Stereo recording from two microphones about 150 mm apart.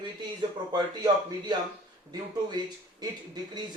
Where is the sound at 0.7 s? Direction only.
25° right (ahead or behind).